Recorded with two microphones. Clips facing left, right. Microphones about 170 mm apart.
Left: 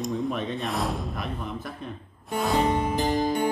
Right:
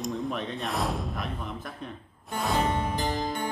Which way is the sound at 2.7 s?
20° left (ahead or behind).